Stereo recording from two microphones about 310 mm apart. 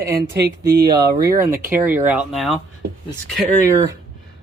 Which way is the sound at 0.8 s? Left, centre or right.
Centre.